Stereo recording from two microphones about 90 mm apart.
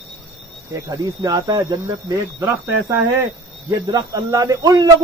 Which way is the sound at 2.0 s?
30° right (ahead or behind).